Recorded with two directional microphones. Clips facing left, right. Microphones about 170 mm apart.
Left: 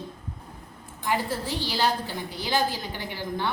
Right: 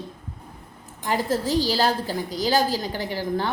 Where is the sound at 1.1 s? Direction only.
40° right (ahead or behind).